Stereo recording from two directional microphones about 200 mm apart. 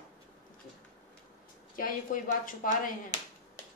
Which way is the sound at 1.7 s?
45° left (ahead or behind).